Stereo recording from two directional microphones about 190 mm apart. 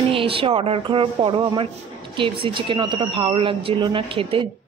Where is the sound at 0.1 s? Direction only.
30° right (ahead or behind).